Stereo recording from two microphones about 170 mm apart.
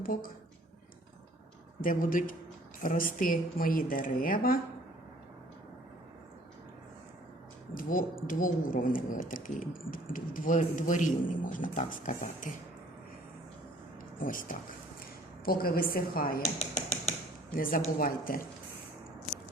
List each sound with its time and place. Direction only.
0.0 s speech: 55° left (ahead or behind)
1.8 s a woman's voice: 55° left (ahead or behind)
7.8 s a woman's voice: 55° left (ahead or behind)
14.2 s a woman's voice: 55° left (ahead or behind)
17.5 s speech: 55° left (ahead or behind)